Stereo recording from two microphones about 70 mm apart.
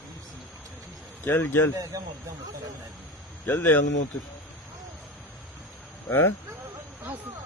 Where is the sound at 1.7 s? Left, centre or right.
Right.